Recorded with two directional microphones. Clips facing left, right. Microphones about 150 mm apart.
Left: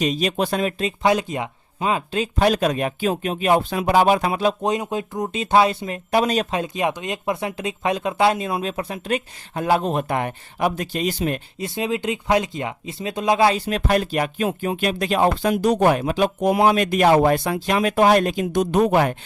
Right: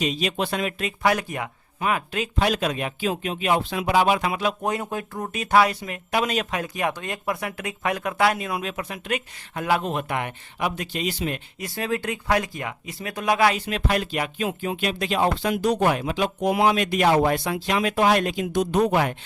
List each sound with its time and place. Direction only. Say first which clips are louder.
0.0 s speech: left 4 dB; 40° left (ahead or behind)
4.6 s speech: left 4 dB; 20° left (ahead or behind); by 6.6 s 35° left (ahead or behind)
6.6 s speech: left 3 dB; 20° left (ahead or behind); by 11.3 s 45° left (ahead or behind)
11.6 s speech: left 3 dB; 20° left (ahead or behind); by 19.1 s 50° left (ahead or behind)